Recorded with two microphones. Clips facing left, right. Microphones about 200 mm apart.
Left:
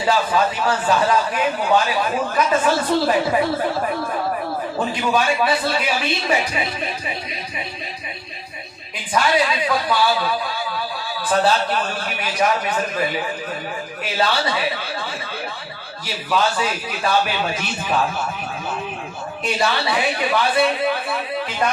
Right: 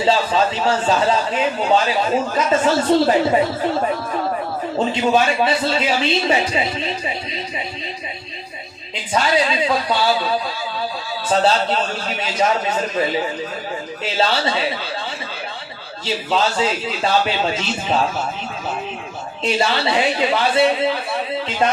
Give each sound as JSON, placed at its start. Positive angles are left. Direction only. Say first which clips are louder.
{"t": 0.0, "sound": "a man's voice", "louder": "right 2 dB", "side_deg": -25}
{"t": 4.9, "sound": "a man's voice", "louder": "right 3 dB", "side_deg": -25}
{"t": 9.1, "sound": "a man's voice", "louder": "right 1 dB", "side_deg": -25}
{"t": 11.3, "sound": "a man's voice", "louder": "right 1 dB", "side_deg": -25}
{"t": 16.0, "sound": "a man's voice", "louder": "right 1 dB", "side_deg": -25}
{"t": 19.4, "sound": "a man's voice", "louder": "right 2 dB", "side_deg": -25}